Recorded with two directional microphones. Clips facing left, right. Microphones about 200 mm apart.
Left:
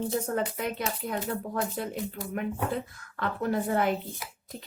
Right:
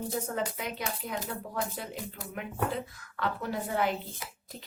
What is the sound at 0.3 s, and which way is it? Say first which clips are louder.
Speech: left 4 dB; 50° left (ahead or behind).